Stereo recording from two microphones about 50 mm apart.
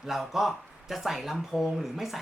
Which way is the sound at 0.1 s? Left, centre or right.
Centre.